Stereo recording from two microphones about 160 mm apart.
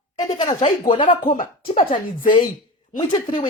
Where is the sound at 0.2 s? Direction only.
25° left (ahead or behind).